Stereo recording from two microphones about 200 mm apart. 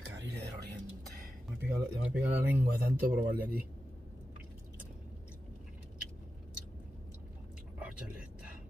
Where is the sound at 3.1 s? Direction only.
45° right (ahead or behind).